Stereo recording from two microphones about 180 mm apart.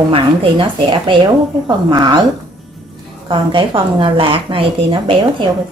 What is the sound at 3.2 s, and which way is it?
Speech, 25° right (ahead or behind).